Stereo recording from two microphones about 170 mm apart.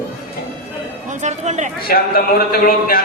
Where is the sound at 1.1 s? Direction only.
45° right (ahead or behind).